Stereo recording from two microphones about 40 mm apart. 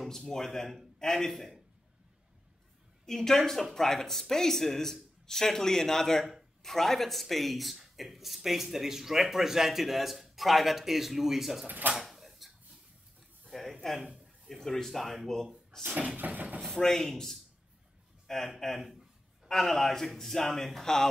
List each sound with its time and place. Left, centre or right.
0.0 s speech: centre
3.1 s a man's voice: centre
11.6 s speech: right
12.0 s drawer open or close: centre
13.5 s a sound: centre
14.0 s a sound: centre
14.5 s speech: centre
16.2 s speech: right
16.7 s speech: centre
18.2 s a sound: centre
18.8 s speech: centre
19.4 s a man's voice: centre